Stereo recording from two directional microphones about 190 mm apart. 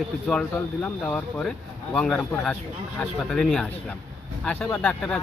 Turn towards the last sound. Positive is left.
turn(degrees=5)  # may be behind; listen again after turning